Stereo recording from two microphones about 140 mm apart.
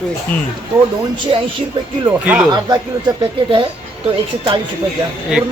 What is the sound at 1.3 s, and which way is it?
Speech, 40° right (ahead or behind).